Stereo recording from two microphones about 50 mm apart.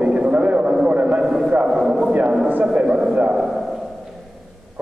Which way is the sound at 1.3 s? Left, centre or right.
Centre.